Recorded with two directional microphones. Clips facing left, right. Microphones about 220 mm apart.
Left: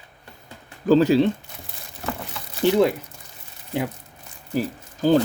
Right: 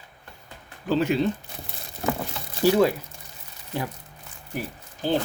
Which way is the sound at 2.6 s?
20° left (ahead or behind).